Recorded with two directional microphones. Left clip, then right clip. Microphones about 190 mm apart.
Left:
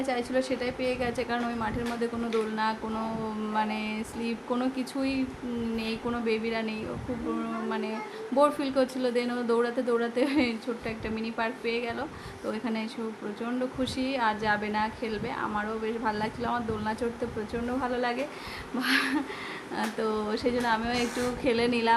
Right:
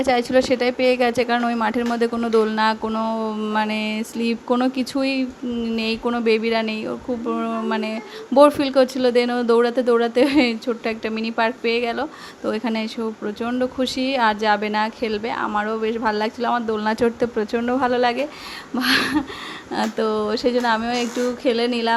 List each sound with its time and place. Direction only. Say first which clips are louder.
0.0 s a woman's voice: right 11 dB; 45° right (ahead or behind)
5.7 s a sound: right 11 dB; 45° right (ahead or behind)
7.3 s a woman's voice: right 9 dB; 40° right (ahead or behind); by 21.9 s 25° right (ahead or behind)